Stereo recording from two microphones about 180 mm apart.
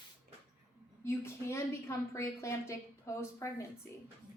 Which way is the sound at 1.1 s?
15° left (ahead or behind).